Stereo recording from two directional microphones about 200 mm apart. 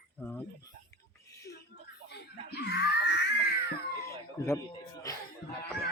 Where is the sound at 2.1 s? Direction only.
55° left (ahead or behind).